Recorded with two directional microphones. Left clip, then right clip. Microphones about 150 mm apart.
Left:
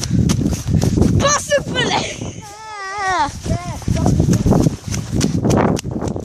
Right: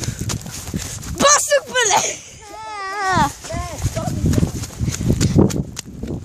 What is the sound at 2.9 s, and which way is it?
Speech, centre (ahead or behind).